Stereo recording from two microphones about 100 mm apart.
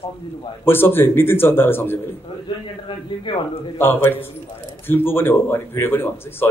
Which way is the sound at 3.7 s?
20° left (ahead or behind).